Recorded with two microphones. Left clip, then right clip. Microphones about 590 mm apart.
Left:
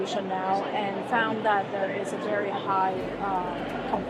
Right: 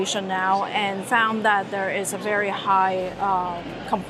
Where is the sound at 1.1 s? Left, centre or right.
Right.